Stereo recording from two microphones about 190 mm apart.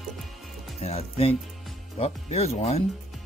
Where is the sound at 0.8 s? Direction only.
35° left (ahead or behind).